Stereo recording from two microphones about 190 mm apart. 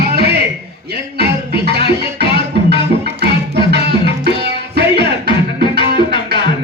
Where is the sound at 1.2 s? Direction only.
60° right (ahead or behind).